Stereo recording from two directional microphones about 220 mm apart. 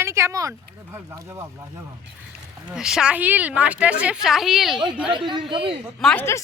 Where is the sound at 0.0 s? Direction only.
15° right (ahead or behind).